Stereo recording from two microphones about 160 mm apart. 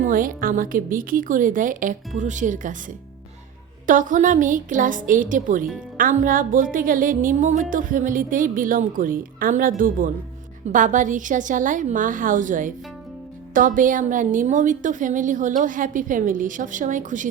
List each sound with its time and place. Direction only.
0.0 s music: 60° right (ahead or behind)
3.8 s music: 55° right (ahead or behind)
10.7 s a woman's voice: 55° right (ahead or behind)